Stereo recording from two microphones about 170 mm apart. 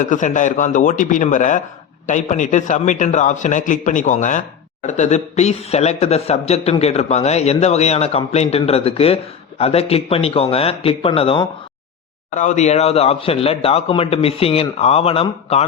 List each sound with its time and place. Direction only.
0.1 s a man's voice: 45° left (ahead or behind)
12.3 s a man's voice: 45° left (ahead or behind)